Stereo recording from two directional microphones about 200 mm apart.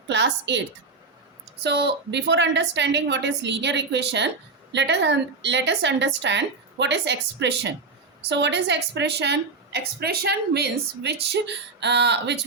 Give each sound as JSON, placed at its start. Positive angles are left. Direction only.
{"t": 0.1, "sound": "a woman's voice", "side_deg": -60}
{"t": 1.6, "sound": "a woman's voice", "side_deg": -55}